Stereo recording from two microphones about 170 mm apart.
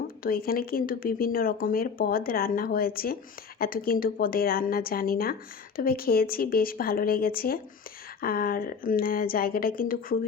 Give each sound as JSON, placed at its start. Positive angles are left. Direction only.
{"t": 0.2, "sound": "speech", "side_deg": 60}